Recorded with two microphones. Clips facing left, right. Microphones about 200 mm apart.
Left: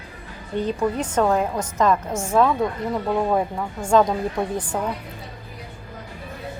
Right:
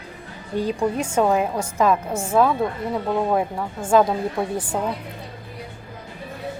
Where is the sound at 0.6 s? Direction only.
10° right (ahead or behind).